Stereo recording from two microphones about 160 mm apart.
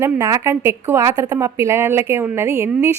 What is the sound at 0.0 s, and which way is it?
A woman's voice, 20° right (ahead or behind).